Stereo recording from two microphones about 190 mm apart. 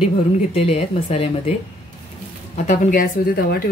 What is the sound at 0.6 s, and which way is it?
Speech, 30° left (ahead or behind).